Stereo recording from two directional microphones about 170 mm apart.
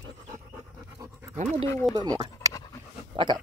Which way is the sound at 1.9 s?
25° right (ahead or behind).